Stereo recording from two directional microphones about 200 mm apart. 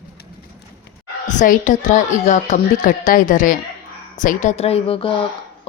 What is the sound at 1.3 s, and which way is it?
A woman's voice, 40° left (ahead or behind).